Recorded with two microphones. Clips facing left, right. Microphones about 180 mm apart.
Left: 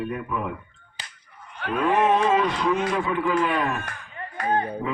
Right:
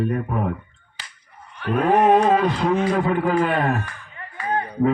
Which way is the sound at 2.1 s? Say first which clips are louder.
Right 4 dB; 45° right (ahead or behind).